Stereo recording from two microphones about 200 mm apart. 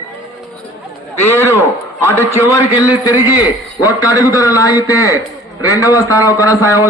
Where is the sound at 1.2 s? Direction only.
15° left (ahead or behind).